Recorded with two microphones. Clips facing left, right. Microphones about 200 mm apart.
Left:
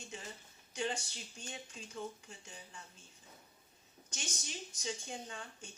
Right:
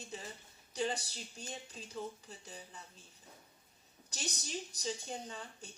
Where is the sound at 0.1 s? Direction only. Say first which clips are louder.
Right 2 dB; 35° right (ahead or behind).